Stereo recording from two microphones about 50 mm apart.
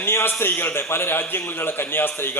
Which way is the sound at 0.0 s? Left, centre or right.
Left.